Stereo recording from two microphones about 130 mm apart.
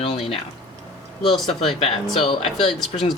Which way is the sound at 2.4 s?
Centre (ahead or behind).